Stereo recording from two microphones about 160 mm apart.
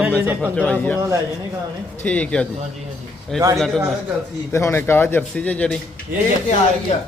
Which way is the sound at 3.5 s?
Centre (ahead or behind).